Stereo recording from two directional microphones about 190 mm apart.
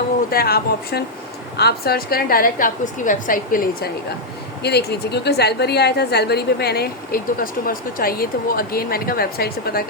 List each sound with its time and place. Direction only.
0.3 s a woman's voice: 55° left (ahead or behind)
4.6 s a woman's voice: 60° left (ahead or behind)